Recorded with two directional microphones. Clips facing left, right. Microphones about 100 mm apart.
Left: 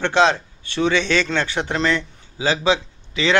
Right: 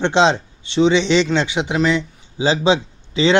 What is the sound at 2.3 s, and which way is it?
A man's voice, 25° right (ahead or behind).